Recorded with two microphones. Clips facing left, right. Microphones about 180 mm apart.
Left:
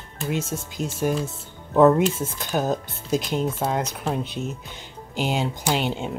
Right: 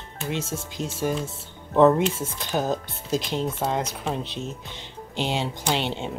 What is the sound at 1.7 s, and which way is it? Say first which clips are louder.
Speech: left 1 dB; 5° left (ahead or behind).